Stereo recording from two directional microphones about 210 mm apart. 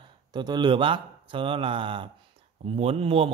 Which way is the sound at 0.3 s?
20° right (ahead or behind).